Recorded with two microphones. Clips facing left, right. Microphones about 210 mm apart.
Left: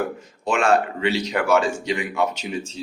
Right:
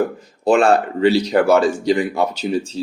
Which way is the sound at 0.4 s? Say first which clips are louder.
Right 5 dB; 35° right (ahead or behind).